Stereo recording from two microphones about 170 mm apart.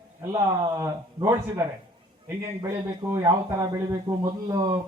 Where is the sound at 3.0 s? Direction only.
20° right (ahead or behind).